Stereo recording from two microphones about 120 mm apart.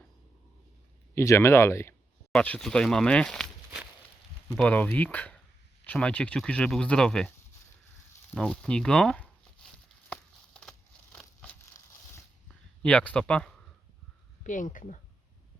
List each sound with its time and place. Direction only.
1.1 s speech: 25° left (ahead or behind)
2.3 s speech: 10° left (ahead or behind)
4.5 s speech: 10° left (ahead or behind)
8.4 s speech: 5° left (ahead or behind)
10.1 s crumpling: 5° left (ahead or behind)
12.8 s speech: 10° left (ahead or behind)
14.4 s speech: 90° left